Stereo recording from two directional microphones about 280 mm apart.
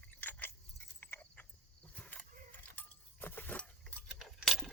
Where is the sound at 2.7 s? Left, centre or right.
Centre.